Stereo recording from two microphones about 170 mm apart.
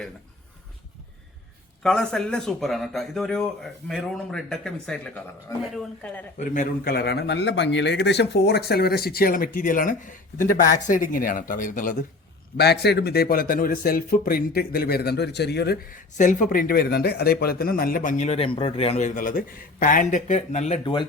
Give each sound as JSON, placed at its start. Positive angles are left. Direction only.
{"t": 1.8, "sound": "speech", "side_deg": 5}
{"t": 6.5, "sound": "a man's voice", "side_deg": 55}
{"t": 12.5, "sound": "a man's voice", "side_deg": 75}